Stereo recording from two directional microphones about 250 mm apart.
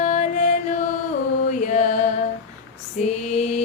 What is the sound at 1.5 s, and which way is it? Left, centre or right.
Music, left.